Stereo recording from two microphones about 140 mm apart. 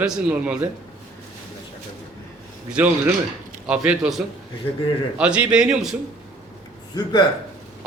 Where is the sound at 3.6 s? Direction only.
10° right (ahead or behind).